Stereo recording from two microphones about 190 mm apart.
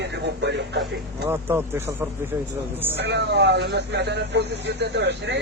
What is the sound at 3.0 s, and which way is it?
Speech, 60° right (ahead or behind).